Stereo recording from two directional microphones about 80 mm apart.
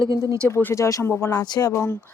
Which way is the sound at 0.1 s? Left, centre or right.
Right.